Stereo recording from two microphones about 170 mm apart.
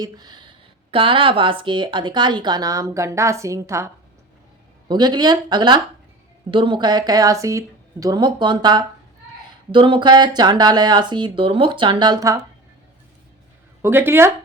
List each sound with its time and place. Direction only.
0.0 s speech: 25° right (ahead or behind)
13.8 s speech: 15° right (ahead or behind)